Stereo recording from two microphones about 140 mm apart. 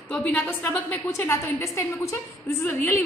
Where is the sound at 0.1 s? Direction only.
15° left (ahead or behind).